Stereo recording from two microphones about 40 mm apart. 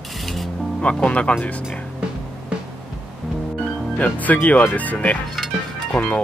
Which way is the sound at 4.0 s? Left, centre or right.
Left.